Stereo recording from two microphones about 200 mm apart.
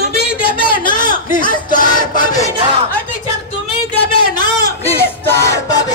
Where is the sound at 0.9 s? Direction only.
40° left (ahead or behind).